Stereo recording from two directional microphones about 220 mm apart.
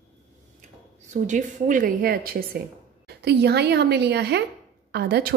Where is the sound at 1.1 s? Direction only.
35° right (ahead or behind).